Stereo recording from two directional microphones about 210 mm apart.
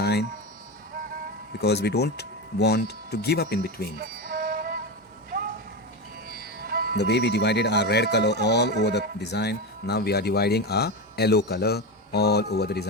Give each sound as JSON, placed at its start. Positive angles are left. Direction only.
{"t": 0.0, "sound": "music", "side_deg": 50}
{"t": 1.6, "sound": "speech", "side_deg": 50}
{"t": 3.9, "sound": "music", "side_deg": -45}
{"t": 6.2, "sound": "music", "side_deg": -45}
{"t": 6.9, "sound": "speech", "side_deg": 55}